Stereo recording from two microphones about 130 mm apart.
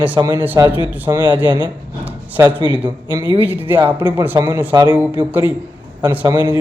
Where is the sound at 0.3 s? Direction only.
15° right (ahead or behind).